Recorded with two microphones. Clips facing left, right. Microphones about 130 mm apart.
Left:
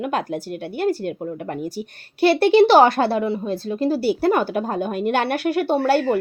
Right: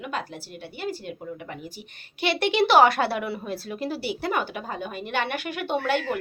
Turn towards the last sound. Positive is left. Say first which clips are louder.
# left 7 dB
turn(degrees=40)  # may be behind; listen again after turning